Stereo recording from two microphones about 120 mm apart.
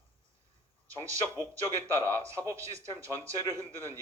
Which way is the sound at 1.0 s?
25° right (ahead or behind).